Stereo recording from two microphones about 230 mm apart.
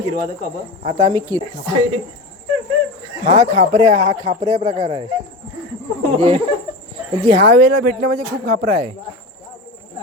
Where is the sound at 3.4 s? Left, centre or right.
Right.